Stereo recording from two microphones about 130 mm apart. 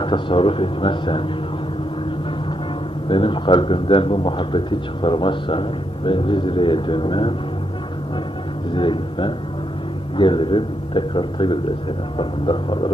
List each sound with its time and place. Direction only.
0.0 s a man's voice: 40° left (ahead or behind)
3.1 s a man's voice: 40° left (ahead or behind)
8.7 s a man's voice: 40° left (ahead or behind)